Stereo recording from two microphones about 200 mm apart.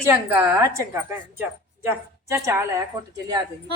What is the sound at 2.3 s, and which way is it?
Speech, 15° right (ahead or behind).